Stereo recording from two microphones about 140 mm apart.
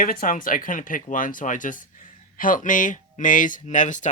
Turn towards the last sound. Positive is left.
turn(degrees=65)  # may be behind; listen again after turning